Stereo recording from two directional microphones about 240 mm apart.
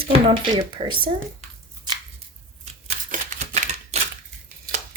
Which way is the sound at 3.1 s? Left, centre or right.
Right.